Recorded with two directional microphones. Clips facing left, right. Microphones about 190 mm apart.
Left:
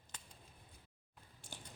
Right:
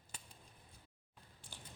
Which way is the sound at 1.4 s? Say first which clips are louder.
Left 4 dB; 45° left (ahead or behind).